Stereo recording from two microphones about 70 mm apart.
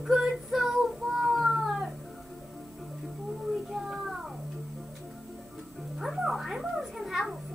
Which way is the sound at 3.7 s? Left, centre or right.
Centre.